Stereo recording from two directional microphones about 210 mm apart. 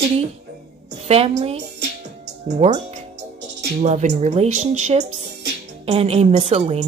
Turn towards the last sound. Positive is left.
turn(degrees=-30)  # may be behind; listen again after turning